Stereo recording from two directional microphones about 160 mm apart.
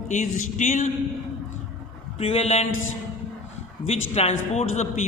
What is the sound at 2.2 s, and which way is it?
Speech, 40° left (ahead or behind).